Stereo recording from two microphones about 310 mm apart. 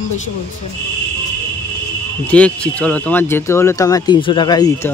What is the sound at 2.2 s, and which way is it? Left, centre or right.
Speech, centre.